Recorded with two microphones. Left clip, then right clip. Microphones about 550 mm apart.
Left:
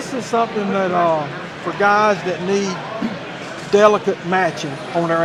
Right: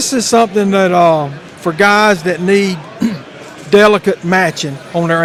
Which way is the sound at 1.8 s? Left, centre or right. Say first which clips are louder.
Right 5 dB; right.